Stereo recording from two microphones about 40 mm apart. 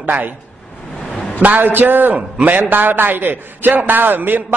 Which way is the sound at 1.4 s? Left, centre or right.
Right.